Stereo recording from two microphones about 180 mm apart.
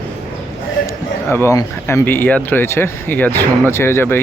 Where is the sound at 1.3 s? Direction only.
15° left (ahead or behind).